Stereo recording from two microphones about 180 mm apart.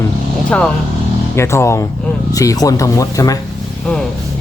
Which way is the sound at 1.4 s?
15° left (ahead or behind).